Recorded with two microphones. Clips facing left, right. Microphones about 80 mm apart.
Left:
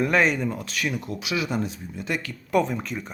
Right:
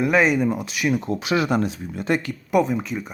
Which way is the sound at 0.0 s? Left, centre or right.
Centre.